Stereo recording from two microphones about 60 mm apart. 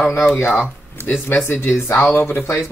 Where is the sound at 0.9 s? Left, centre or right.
Left.